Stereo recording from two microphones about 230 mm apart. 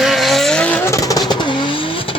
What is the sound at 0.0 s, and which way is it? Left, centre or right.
Vehicle, centre.